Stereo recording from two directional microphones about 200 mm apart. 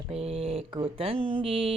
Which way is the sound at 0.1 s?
30° right (ahead or behind).